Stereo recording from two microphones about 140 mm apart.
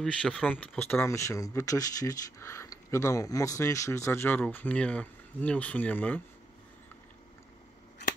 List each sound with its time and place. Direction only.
0.0 s speech: 5° left (ahead or behind)